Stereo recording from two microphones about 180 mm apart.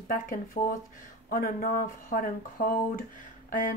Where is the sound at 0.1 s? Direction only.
50° left (ahead or behind).